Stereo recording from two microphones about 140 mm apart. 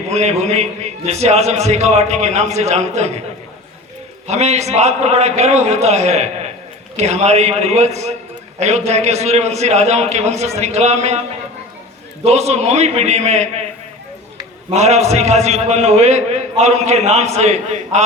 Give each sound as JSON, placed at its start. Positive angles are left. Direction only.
{"t": 0.1, "sound": "a man's voice", "side_deg": -50}
{"t": 4.3, "sound": "a man's voice", "side_deg": -55}
{"t": 12.2, "sound": "a man's voice", "side_deg": -50}
{"t": 14.7, "sound": "a man's voice", "side_deg": -55}